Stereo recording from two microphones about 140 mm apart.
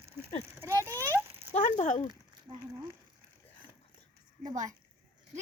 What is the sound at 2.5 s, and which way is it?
Speech, 30° right (ahead or behind).